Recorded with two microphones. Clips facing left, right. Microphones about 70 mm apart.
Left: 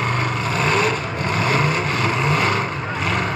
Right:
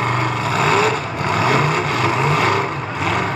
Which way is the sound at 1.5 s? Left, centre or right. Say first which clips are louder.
Right 3 dB; right.